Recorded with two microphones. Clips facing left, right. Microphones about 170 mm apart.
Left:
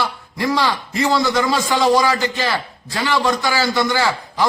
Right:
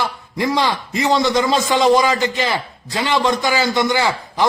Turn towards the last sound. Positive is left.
turn(degrees=-20)  # may be behind; listen again after turning